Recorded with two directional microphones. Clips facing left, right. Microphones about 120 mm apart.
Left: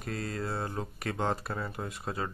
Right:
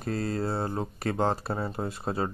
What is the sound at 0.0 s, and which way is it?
Speech, 35° right (ahead or behind).